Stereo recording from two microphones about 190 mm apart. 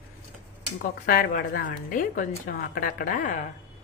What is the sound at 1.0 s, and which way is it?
A woman's voice, 45° left (ahead or behind).